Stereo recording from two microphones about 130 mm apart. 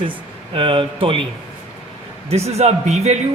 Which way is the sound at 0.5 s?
40° right (ahead or behind).